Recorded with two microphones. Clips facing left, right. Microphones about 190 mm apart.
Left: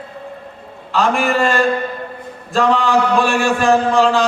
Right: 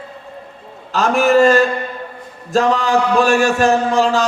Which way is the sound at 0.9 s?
40° right (ahead or behind).